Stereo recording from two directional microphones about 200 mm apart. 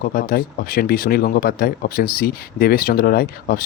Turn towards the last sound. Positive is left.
turn(degrees=50)  # may be behind; listen again after turning